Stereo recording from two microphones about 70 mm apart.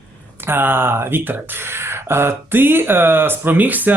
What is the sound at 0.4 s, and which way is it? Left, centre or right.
Speech, right.